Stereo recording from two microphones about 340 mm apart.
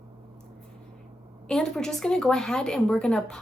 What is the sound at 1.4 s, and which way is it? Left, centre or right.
Speech, centre.